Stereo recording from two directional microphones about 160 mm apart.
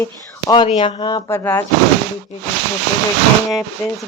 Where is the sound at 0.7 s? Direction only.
35° left (ahead or behind).